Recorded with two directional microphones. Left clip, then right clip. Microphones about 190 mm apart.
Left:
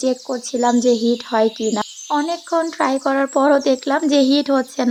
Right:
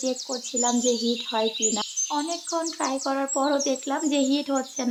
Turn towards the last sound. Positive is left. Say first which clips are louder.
# left 9 dB
turn(degrees=35)  # may be behind; listen again after turning